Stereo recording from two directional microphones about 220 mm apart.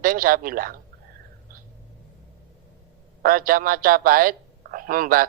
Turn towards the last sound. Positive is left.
turn(degrees=-40)  # may be behind; listen again after turning